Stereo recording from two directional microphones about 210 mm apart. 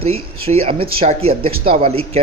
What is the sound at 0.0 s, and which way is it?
A man's voice, 30° right (ahead or behind).